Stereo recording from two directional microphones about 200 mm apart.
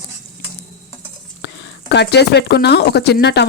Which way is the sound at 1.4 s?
55° left (ahead or behind).